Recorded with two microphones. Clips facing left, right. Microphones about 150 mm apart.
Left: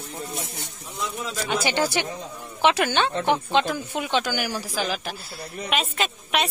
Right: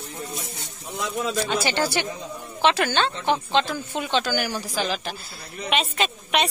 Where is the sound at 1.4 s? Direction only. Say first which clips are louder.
Even; 15° left (ahead or behind).